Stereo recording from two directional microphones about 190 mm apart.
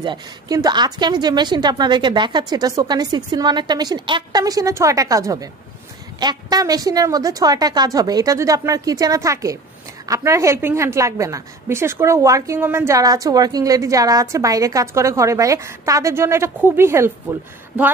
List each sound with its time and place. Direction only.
0.0 s a woman's voice: 20° right (ahead or behind)